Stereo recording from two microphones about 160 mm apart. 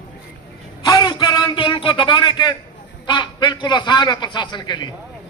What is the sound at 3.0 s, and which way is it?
A man's voice, 30° left (ahead or behind).